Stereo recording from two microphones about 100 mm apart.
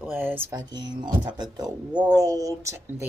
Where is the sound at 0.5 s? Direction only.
45° right (ahead or behind).